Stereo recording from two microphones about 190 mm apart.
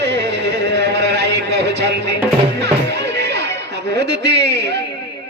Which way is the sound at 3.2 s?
65° right (ahead or behind).